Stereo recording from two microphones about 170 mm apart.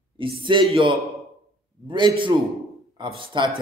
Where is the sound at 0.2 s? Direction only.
30° right (ahead or behind).